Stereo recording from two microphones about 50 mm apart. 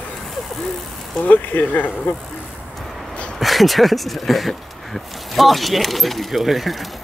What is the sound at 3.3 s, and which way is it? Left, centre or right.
Speech, centre.